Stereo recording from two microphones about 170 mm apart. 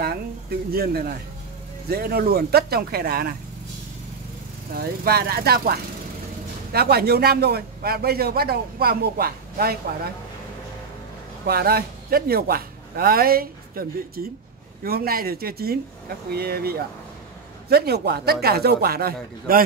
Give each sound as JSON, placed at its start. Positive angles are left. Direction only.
{"t": 0.0, "sound": "a man's voice", "side_deg": -65}
{"t": 4.7, "sound": "a man's voice", "side_deg": -65}
{"t": 11.4, "sound": "a man's voice", "side_deg": -65}